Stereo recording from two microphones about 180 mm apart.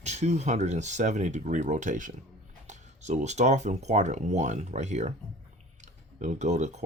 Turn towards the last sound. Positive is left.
turn(degrees=-40)  # may be behind; listen again after turning